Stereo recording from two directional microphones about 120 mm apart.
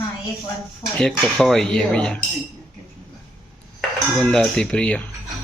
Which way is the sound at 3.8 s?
5° left (ahead or behind).